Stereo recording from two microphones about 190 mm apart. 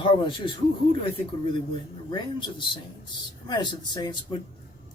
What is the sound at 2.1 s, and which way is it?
Speech, 25° left (ahead or behind).